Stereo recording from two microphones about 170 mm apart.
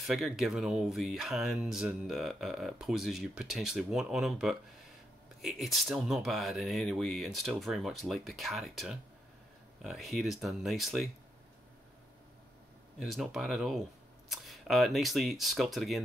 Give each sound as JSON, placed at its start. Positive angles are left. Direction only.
{"t": 0.0, "sound": "speech", "side_deg": 0}
{"t": 13.0, "sound": "speech", "side_deg": 0}